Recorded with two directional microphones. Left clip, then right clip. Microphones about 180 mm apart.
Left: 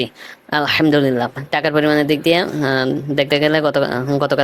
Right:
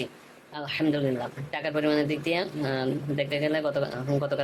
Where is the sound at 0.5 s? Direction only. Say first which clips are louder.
Left 14 dB; 45° left (ahead or behind).